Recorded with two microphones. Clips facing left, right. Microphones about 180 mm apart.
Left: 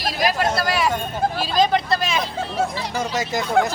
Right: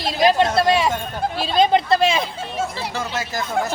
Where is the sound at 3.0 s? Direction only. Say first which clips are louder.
Left 4 dB; 20° left (ahead or behind).